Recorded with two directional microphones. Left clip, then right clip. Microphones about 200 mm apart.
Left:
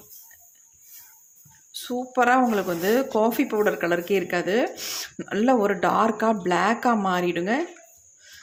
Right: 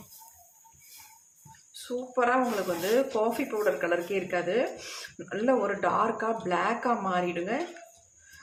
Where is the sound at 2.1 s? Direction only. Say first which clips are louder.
Left 6 dB; 50° left (ahead or behind).